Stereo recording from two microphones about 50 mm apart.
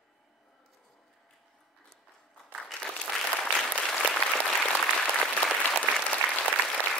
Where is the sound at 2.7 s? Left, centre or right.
Centre.